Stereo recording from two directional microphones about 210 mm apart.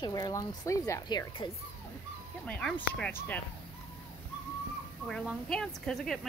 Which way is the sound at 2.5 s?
5° left (ahead or behind).